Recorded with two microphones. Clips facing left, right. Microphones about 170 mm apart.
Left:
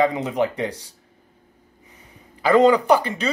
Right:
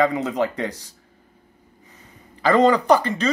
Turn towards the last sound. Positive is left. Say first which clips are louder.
# right 1 dB
turn(degrees=10)  # may be behind; listen again after turning